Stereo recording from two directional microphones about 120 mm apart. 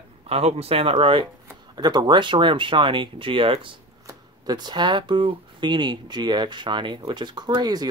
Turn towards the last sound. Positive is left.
turn(degrees=-35)  # may be behind; listen again after turning